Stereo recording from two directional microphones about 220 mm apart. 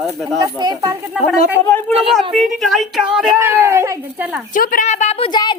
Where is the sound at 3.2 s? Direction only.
10° right (ahead or behind).